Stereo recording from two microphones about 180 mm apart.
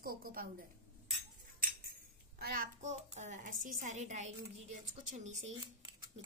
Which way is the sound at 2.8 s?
40° right (ahead or behind).